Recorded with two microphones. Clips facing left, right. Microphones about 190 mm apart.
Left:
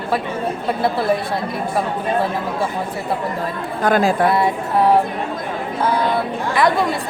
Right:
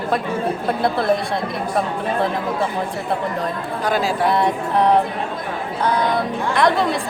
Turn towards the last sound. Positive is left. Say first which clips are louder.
# even
turn(degrees=5)  # may be behind; listen again after turning